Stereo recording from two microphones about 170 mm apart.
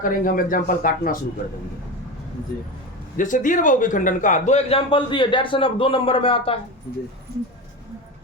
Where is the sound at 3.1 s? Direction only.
50° left (ahead or behind); by 6.5 s 30° left (ahead or behind).